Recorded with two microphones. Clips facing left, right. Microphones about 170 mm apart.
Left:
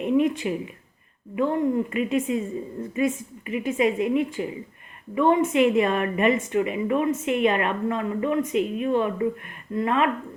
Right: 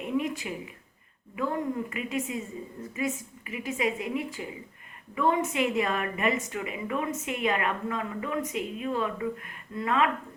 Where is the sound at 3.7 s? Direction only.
25° left (ahead or behind).